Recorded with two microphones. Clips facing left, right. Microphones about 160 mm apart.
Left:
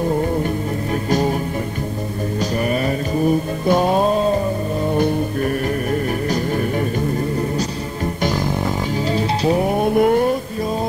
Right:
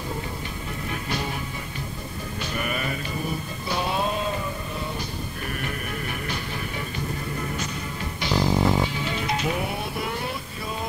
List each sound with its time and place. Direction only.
2.6 s music: 35° left (ahead or behind)
4.9 s music: 50° left (ahead or behind)
9.1 s music: 35° left (ahead or behind)
9.8 s a sound: 50° left (ahead or behind)